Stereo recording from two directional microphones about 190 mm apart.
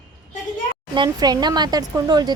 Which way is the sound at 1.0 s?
20° right (ahead or behind).